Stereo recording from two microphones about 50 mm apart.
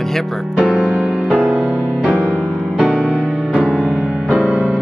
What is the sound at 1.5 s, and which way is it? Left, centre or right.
Music, centre.